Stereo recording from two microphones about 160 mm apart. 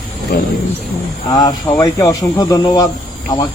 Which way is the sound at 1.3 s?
25° left (ahead or behind).